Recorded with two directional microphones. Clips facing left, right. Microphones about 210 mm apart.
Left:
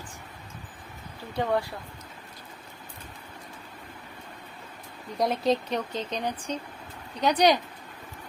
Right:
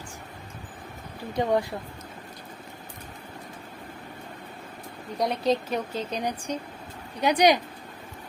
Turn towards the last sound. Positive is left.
turn(degrees=-15)  # may be behind; listen again after turning